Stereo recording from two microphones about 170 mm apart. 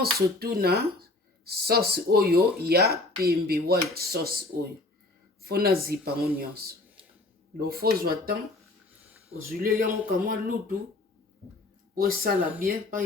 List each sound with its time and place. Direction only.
0.0 s speech: 65° right (ahead or behind)
11.9 s speech: 60° right (ahead or behind)